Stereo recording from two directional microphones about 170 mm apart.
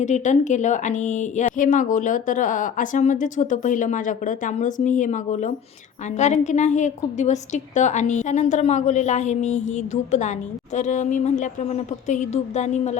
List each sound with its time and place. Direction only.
0.0 s speech: 45° left (ahead or behind)